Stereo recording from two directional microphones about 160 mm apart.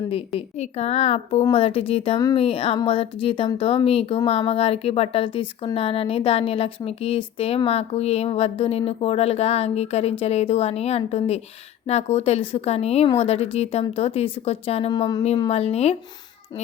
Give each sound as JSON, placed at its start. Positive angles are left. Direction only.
{"t": 0.3, "sound": "speech", "side_deg": 40}
{"t": 15.4, "sound": "speech", "side_deg": 40}